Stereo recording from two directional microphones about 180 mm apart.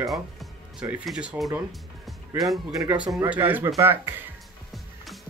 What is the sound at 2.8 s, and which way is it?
Speech, 10° right (ahead or behind).